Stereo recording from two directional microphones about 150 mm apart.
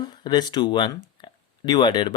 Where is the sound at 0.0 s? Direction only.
30° left (ahead or behind).